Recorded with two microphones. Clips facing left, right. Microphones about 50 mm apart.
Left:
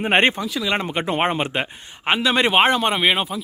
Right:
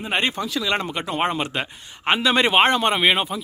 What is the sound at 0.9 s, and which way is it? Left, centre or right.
Speech, left.